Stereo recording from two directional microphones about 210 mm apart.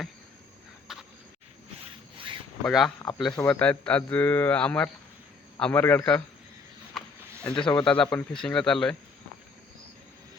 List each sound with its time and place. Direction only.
0.9 s a sound: centre (ahead or behind)
2.1 s zipper: 25° right (ahead or behind)
2.6 s speech: centre (ahead or behind)
3.0 s speech: 20° left (ahead or behind)
7.0 s a sound: centre (ahead or behind)
7.4 s speech: 5° left (ahead or behind)